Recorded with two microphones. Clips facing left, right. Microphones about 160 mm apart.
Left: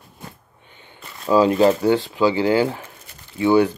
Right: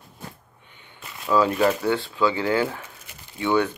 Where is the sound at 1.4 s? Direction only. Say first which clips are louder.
Left 6 dB; 25° left (ahead or behind).